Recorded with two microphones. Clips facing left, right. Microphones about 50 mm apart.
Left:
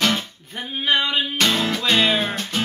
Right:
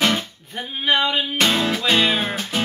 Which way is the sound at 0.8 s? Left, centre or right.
Centre.